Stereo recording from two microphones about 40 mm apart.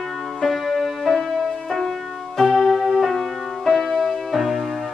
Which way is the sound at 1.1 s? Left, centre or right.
Centre.